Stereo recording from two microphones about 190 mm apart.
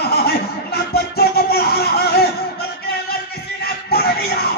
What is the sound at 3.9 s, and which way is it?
Music, 55° left (ahead or behind).